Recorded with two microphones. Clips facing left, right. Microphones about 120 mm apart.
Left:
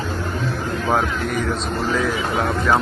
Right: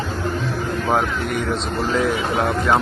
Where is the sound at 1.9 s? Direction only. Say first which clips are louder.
Right 2 dB; 25° right (ahead or behind).